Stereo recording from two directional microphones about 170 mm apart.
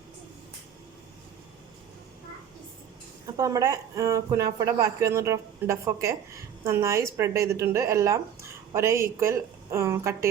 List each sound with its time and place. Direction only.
3.3 s a woman's voice: 20° right (ahead or behind)